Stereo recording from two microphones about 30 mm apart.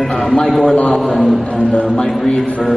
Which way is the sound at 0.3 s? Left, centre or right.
Left.